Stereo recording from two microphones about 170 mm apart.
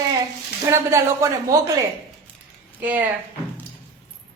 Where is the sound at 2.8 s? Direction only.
10° right (ahead or behind).